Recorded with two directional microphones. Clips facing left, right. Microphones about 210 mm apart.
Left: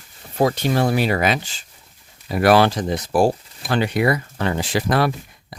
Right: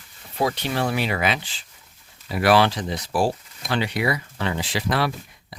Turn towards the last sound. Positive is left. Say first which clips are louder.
# left 4 dB
turn(degrees=45)  # may be behind; listen again after turning